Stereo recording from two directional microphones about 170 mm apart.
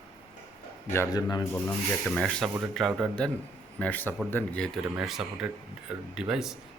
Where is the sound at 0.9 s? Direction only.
20° left (ahead or behind).